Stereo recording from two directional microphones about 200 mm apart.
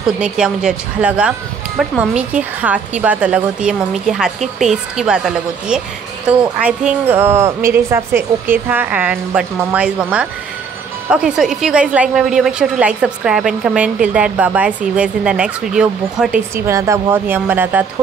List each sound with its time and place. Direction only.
0.0 s a woman's voice: 5° right (ahead or behind)
16.6 s a woman's voice: 15° right (ahead or behind)